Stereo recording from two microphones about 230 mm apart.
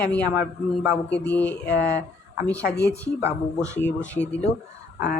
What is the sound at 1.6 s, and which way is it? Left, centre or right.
Speech, left.